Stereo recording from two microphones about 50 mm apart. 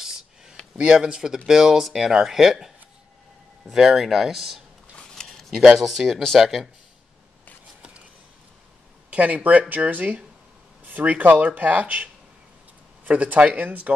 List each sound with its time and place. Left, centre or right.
0.7 s speech: centre
3.7 s speech: centre
5.1 s speech: centre
9.1 s speech: right